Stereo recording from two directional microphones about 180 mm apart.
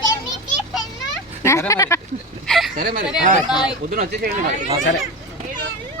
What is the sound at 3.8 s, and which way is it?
Fowl, 45° right (ahead or behind).